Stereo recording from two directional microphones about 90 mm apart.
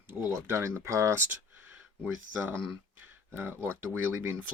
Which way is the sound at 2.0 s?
15° right (ahead or behind).